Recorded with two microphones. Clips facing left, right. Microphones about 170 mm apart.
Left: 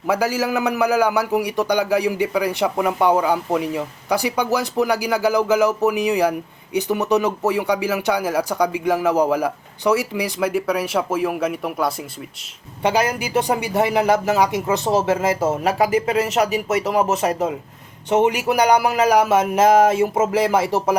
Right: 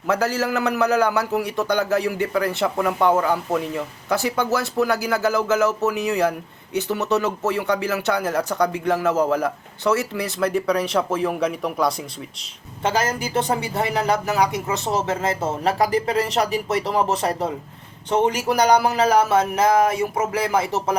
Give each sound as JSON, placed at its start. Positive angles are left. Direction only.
{"t": 0.1, "sound": "a man's voice", "side_deg": 10}
{"t": 15.4, "sound": "a man's voice", "side_deg": 10}